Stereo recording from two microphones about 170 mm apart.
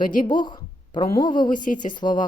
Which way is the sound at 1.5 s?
50° left (ahead or behind).